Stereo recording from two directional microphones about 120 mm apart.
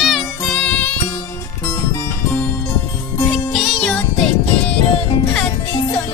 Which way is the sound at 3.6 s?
5° left (ahead or behind).